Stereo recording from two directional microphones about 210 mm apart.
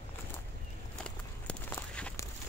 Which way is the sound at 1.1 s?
5° left (ahead or behind).